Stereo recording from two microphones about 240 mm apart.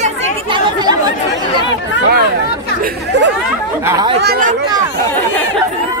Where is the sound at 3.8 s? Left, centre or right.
Centre.